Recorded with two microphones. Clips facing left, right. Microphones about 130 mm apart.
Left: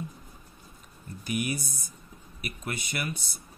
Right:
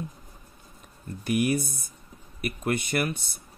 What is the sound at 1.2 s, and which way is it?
Speech, 60° right (ahead or behind).